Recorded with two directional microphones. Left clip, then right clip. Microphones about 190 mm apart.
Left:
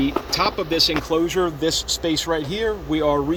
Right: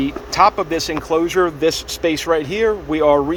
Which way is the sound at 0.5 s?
65° right (ahead or behind).